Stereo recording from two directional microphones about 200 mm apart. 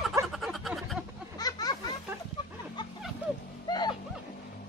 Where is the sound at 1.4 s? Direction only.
20° left (ahead or behind).